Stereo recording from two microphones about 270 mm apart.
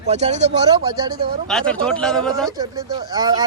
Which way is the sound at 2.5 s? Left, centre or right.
Centre.